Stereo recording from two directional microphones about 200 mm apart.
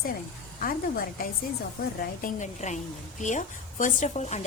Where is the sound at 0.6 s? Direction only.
45° left (ahead or behind).